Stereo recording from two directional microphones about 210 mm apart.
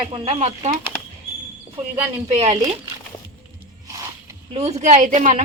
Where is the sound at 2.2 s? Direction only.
30° right (ahead or behind).